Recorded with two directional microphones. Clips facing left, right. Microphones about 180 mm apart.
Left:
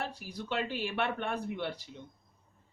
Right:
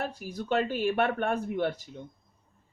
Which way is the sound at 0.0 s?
45° right (ahead or behind).